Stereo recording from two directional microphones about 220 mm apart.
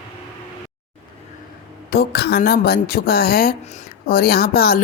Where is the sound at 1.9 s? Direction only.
45° left (ahead or behind).